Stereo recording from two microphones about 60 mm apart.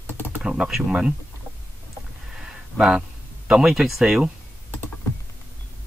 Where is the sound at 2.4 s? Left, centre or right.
Centre.